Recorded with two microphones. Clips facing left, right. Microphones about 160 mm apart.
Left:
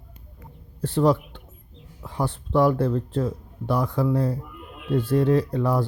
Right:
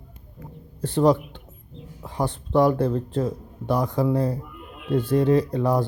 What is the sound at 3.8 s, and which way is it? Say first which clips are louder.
Speech: right 1 dB; 20° right (ahead or behind).